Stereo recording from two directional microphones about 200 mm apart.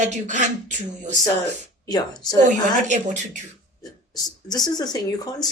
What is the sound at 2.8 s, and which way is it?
Speech, 35° right (ahead or behind).